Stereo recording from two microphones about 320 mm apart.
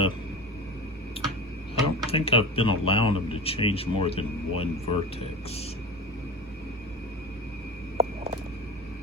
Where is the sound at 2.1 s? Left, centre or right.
Centre.